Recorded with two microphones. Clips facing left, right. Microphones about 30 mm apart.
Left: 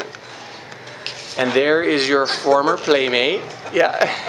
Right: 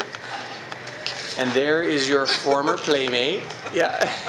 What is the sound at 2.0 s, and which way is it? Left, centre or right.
Speech, left.